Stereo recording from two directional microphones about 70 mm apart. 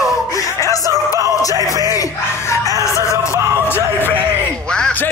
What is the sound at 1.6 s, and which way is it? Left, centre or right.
Music, left.